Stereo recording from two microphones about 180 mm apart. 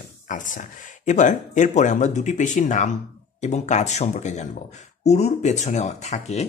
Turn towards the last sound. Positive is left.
turn(degrees=40)  # may be behind; listen again after turning